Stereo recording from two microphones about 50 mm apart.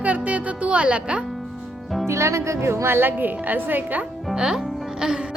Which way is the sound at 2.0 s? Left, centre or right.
Right.